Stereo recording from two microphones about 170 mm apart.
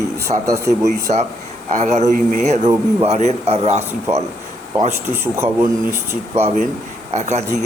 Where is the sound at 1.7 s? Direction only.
45° right (ahead or behind).